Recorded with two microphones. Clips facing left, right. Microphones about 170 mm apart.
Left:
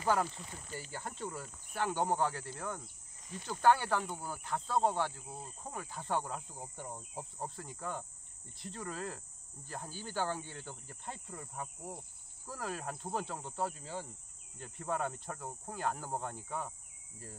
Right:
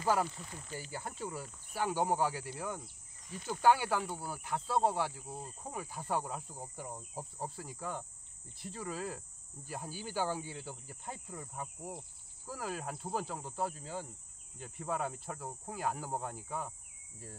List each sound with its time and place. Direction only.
0.1 s speech: 5° right (ahead or behind)
5.6 s cricket: 10° right (ahead or behind)
9.7 s speech: 10° right (ahead or behind)
12.4 s cricket: 5° right (ahead or behind)